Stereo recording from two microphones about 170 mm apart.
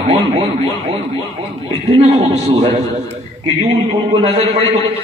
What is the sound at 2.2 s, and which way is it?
Speech, 35° right (ahead or behind).